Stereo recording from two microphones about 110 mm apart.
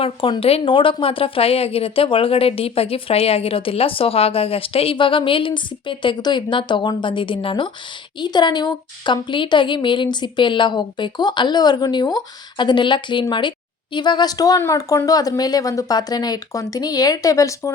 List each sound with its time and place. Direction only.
0.0 s a woman's voice: 55° left (ahead or behind); by 17.7 s 30° left (ahead or behind)